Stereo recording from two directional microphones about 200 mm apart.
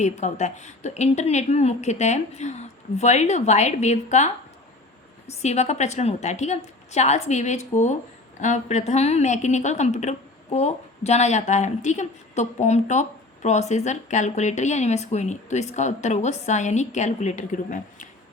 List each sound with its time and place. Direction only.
0.0 s a woman's voice: 35° left (ahead or behind)